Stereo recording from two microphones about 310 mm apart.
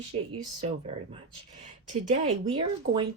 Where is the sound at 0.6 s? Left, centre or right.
Centre.